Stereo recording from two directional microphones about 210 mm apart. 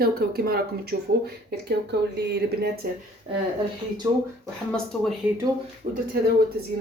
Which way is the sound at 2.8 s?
45° right (ahead or behind).